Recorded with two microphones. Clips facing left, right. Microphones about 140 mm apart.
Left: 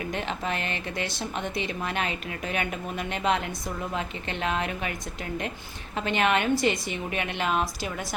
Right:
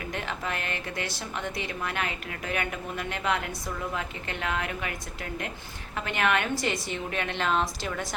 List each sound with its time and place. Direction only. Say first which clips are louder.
0.1 s a woman's voice: even; 20° left (ahead or behind)
6.1 s a woman's voice: left 3 dB; 20° left (ahead or behind)